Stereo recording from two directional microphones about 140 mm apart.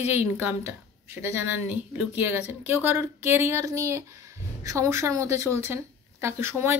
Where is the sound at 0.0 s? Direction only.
15° right (ahead or behind).